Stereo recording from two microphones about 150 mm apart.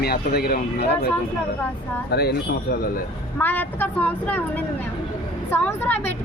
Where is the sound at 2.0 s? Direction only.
90° left.